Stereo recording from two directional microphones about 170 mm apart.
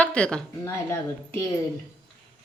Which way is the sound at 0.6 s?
15° left (ahead or behind).